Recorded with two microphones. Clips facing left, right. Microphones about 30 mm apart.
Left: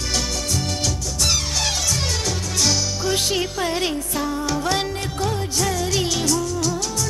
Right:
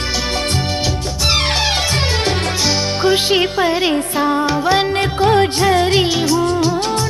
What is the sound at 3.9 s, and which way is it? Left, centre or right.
Music, right.